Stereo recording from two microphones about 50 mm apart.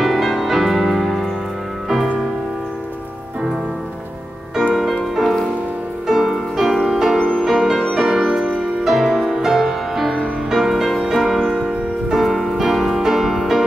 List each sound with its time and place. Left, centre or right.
0.0 s music: centre
5.1 s music: centre
7.2 s music: left
7.4 s music: centre